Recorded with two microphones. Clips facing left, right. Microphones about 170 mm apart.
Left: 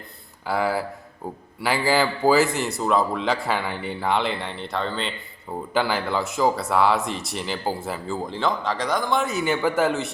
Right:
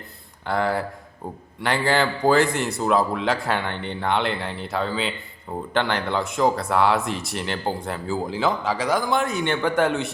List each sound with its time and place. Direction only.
0.4 s speech: 5° left (ahead or behind)